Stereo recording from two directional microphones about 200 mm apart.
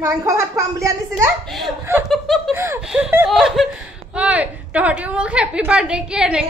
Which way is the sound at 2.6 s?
10° right (ahead or behind).